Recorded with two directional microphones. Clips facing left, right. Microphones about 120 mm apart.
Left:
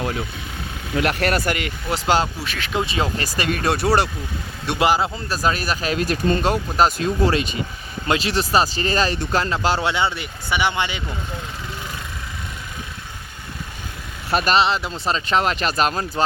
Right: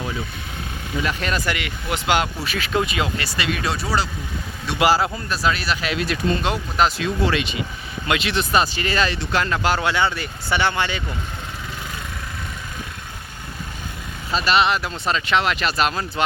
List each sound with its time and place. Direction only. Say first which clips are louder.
0.9 s speech: left 4 dB; 65° left (ahead or behind); by 2.3 s 35° left (ahead or behind)
2.4 s speech: right 2 dB; centre (ahead or behind)
2.8 s speech: left 1 dB; 35° left (ahead or behind)
3.8 s speech: left 5 dB; 65° left (ahead or behind)
4.8 s speech: right 1 dB; 20° left (ahead or behind)
5.3 s speech: left 2 dB; 40° left (ahead or behind); by 11.0 s 15° left (ahead or behind)
14.3 s speech: left 3 dB; 60° left (ahead or behind)
14.5 s speech: right 2 dB; 25° left (ahead or behind)